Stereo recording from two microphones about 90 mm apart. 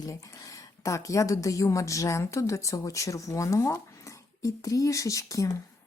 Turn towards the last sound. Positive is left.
turn(degrees=40)  # may be behind; listen again after turning